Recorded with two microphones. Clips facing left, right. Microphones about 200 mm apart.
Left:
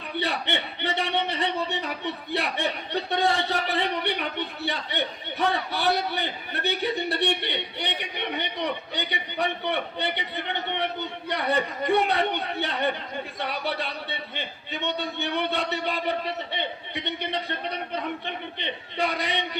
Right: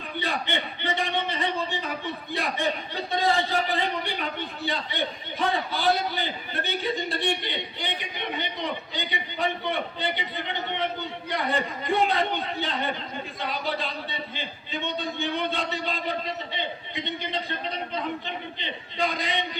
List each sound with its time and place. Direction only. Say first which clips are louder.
0.2 s a man's voice: left 1 dB; 70° left (ahead or behind)